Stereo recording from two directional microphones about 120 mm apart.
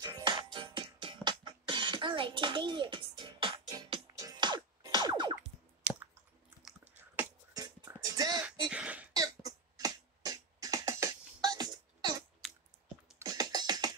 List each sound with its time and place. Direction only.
0.0 s music: 40° right (ahead or behind)
4.1 s music: 30° right (ahead or behind)
5.9 s squish: 10° right (ahead or behind)
7.9 s music: 30° right (ahead or behind)
8.5 s a sound: 10° right (ahead or behind)
9.1 s beatboxing: 30° right (ahead or behind)
12.4 s chewing: 5° right (ahead or behind)
13.2 s music: 30° right (ahead or behind)